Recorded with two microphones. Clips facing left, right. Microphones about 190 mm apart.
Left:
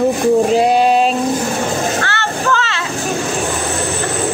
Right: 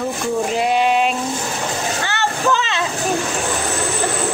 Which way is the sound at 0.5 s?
35° left (ahead or behind).